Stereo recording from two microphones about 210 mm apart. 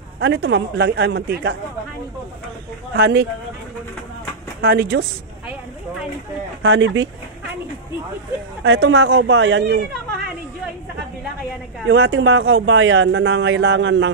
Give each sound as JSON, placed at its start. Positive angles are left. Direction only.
{"t": 0.2, "sound": "speech", "side_deg": -60}
{"t": 2.9, "sound": "speech", "side_deg": -55}
{"t": 4.6, "sound": "a woman's voice", "side_deg": -50}
{"t": 6.6, "sound": "speech", "side_deg": -60}
{"t": 8.6, "sound": "speech", "side_deg": -60}
{"t": 11.9, "sound": "speech", "side_deg": -65}